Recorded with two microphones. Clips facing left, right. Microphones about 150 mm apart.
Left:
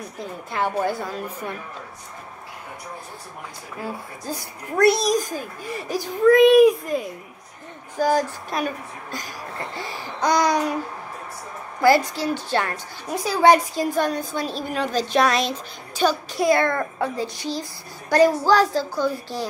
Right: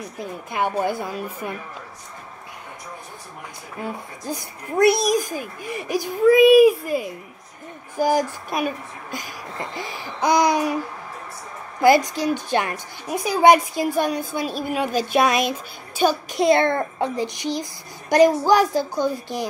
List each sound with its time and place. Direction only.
0.2 s a woman's voice: 15° right (ahead or behind)
3.8 s a woman's voice: 15° right (ahead or behind)
11.8 s a woman's voice: 15° right (ahead or behind)
16.4 s a woman's voice: 25° right (ahead or behind)